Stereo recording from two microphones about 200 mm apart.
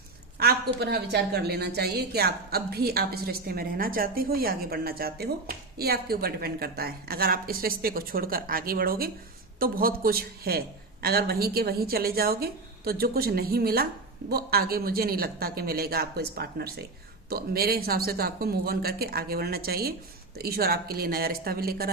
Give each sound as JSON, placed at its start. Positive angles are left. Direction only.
{"t": 0.3, "sound": "a woman's voice", "side_deg": -50}